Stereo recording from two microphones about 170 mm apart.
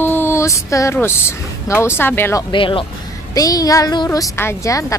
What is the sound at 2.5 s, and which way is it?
A woman's voice, 30° left (ahead or behind).